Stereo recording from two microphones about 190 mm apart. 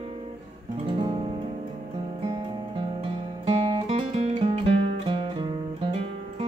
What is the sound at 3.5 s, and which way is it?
Music, 30° right (ahead or behind).